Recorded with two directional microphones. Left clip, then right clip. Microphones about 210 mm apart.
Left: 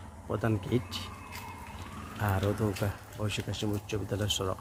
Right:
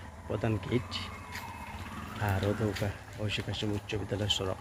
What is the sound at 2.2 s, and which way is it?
Speech, 15° left (ahead or behind).